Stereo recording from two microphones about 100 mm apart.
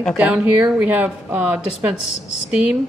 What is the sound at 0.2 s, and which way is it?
Speech, 10° right (ahead or behind).